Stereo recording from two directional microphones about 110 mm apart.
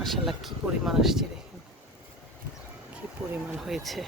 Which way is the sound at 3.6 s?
5° right (ahead or behind).